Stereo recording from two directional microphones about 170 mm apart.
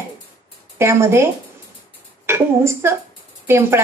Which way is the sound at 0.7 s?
15° right (ahead or behind).